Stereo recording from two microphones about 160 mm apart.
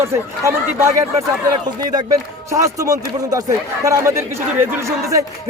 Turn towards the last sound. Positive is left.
turn(degrees=-20)  # may be behind; listen again after turning